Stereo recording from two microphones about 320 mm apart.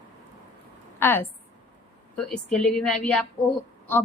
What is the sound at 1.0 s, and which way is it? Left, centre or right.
A woman's voice, centre.